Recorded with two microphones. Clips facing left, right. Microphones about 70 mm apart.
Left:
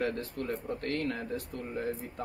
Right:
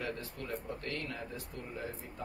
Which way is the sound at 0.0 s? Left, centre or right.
Left.